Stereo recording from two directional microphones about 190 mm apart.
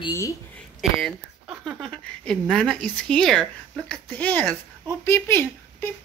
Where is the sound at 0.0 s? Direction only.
15° left (ahead or behind).